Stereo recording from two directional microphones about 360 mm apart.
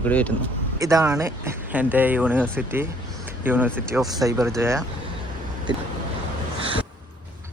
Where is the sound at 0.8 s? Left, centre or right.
Centre.